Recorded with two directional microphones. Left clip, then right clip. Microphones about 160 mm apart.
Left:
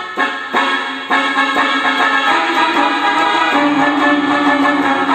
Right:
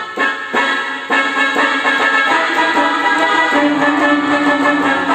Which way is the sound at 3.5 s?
30° left (ahead or behind).